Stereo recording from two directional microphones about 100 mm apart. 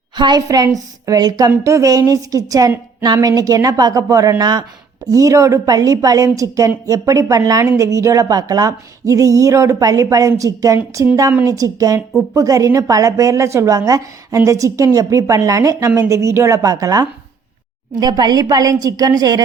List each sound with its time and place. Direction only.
0.2 s a woman's voice: 45° right (ahead or behind)
0.4 s a woman's voice: 35° right (ahead or behind)